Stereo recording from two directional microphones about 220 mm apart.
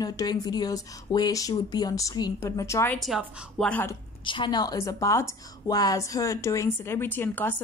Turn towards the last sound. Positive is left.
turn(degrees=10)  # may be behind; listen again after turning